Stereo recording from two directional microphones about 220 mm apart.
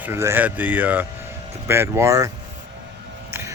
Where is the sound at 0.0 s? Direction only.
10° right (ahead or behind).